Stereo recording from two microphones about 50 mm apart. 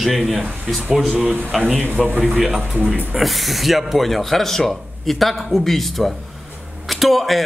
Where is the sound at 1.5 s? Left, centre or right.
Centre.